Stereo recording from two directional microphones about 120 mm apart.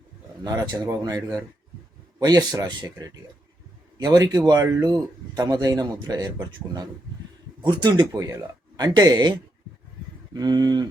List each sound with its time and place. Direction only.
0.4 s speech: 35° right (ahead or behind)
7.6 s speech: 35° right (ahead or behind)
10.3 s speech: 35° right (ahead or behind)